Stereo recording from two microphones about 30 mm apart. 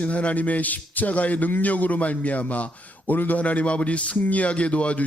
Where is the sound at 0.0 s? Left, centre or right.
Left.